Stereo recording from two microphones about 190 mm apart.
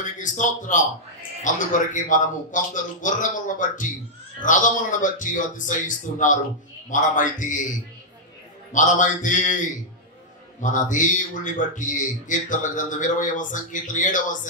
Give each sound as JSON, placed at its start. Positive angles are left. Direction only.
{"t": 0.0, "sound": "speech", "side_deg": 40}
{"t": 8.7, "sound": "speech", "side_deg": 40}